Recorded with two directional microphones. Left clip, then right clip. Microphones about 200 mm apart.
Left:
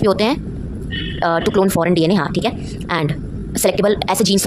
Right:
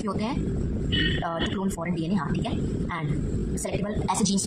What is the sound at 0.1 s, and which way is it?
Speech, 55° left (ahead or behind).